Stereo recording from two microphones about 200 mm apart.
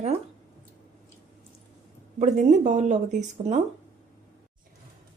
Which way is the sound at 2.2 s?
35° right (ahead or behind).